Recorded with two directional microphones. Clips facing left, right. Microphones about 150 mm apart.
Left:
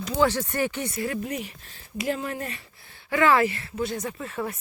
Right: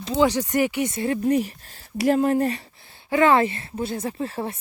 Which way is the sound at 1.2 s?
40° right (ahead or behind).